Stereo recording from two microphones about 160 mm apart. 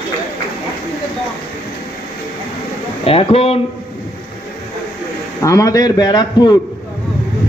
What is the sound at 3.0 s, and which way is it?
Speech, 35° left (ahead or behind).